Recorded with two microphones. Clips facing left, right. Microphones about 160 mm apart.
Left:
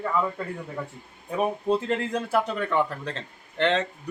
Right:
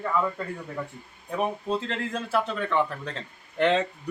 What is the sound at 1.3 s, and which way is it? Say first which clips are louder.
Speech: left 3 dB; 10° left (ahead or behind).